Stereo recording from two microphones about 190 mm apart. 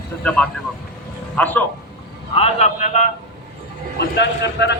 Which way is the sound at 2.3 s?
35° left (ahead or behind).